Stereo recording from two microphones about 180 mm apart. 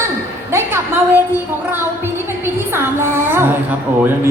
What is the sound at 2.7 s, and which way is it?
Child singing, 15° right (ahead or behind).